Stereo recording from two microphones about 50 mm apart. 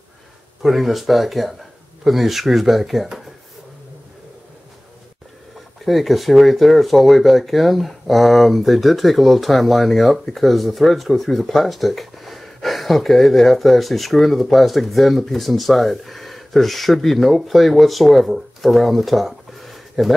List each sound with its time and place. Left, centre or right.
0.6 s speech: centre
5.9 s speech: centre